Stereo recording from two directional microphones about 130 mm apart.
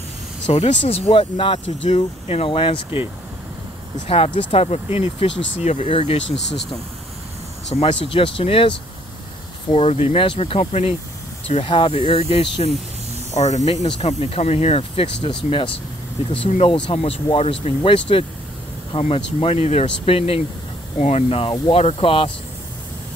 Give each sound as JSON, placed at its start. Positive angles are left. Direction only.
{"t": 0.5, "sound": "speech", "side_deg": 55}
{"t": 4.1, "sound": "speech", "side_deg": 45}
{"t": 7.7, "sound": "speech", "side_deg": 50}
{"t": 13.3, "sound": "speech", "side_deg": 60}